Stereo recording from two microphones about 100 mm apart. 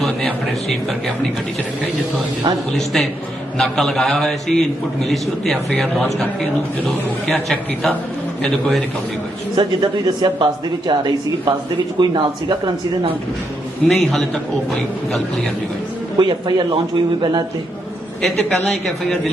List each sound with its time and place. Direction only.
0.0 s a man's voice: 5° left (ahead or behind)
2.7 s a man's voice: centre (ahead or behind)
9.6 s speech: 45° right (ahead or behind)
13.8 s a man's voice: 5° left (ahead or behind)
16.1 s speech: 50° right (ahead or behind)
18.2 s a woman's voice: 10° left (ahead or behind)